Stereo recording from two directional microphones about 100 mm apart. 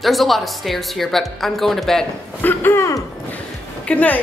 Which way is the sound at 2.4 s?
20° left (ahead or behind).